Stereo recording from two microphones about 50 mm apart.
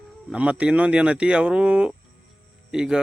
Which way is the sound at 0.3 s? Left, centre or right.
Right.